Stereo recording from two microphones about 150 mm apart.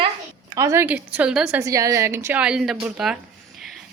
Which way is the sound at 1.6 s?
20° right (ahead or behind).